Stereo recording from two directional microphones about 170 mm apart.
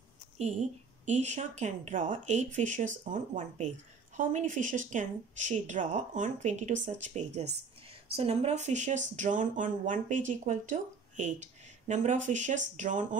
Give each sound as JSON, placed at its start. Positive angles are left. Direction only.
{"t": 0.4, "sound": "speech", "side_deg": -40}